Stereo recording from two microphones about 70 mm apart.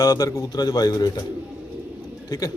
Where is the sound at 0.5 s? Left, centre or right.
Left.